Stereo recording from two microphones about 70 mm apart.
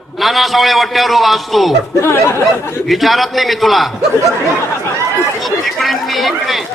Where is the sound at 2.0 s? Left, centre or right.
Left.